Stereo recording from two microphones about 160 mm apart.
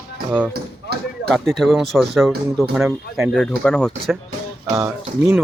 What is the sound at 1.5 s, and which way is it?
Speech, centre (ahead or behind).